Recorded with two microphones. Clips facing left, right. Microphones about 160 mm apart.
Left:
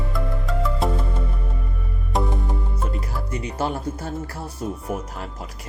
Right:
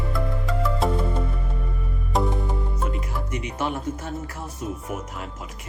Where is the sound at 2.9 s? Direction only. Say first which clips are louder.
Left 1 dB; 35° left (ahead or behind).